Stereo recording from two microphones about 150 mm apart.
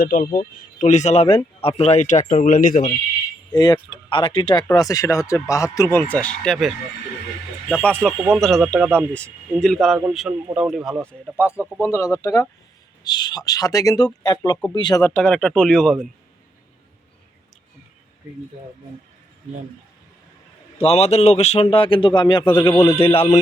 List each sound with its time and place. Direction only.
0.0 s speech: 65° left (ahead or behind)
0.3 s speech: 55° left (ahead or behind)
3.5 s speech: 30° left (ahead or behind); by 10.9 s centre (ahead or behind)
11.3 s speech: 15° left (ahead or behind)
15.0 s speech: 5° left (ahead or behind)
20.7 s a man's voice: 40° left (ahead or behind)